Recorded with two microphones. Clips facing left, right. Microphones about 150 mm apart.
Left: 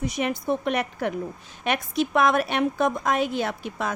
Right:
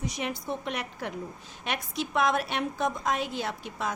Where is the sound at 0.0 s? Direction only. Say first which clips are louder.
Left 7 dB; 60° left (ahead or behind).